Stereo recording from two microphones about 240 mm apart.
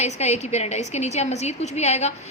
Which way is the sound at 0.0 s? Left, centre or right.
Left.